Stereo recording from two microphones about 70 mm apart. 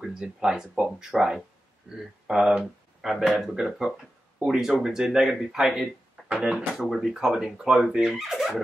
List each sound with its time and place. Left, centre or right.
0.2 s speech: centre